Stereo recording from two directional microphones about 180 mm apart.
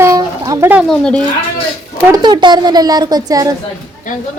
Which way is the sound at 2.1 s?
25° right (ahead or behind).